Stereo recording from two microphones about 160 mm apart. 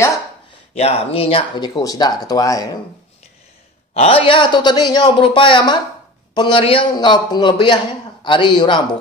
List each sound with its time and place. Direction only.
0.7 s a man's voice: 40° left (ahead or behind); by 2.8 s 25° left (ahead or behind)
3.9 s a man's voice: 40° left (ahead or behind)